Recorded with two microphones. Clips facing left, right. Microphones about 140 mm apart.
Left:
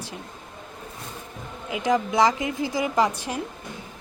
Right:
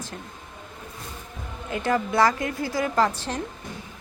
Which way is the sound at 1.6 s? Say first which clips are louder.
Left 1 dB; 10° left (ahead or behind).